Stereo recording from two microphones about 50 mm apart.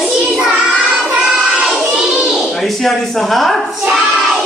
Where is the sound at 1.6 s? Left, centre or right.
Centre.